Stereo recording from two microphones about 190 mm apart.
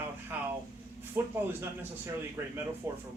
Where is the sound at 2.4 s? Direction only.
15° right (ahead or behind).